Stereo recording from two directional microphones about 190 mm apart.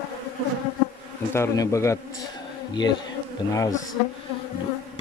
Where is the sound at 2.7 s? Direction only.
25° left (ahead or behind).